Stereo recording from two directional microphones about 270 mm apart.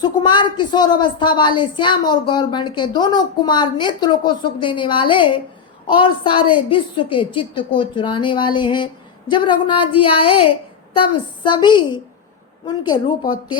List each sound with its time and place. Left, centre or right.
0.0 s a woman's voice: centre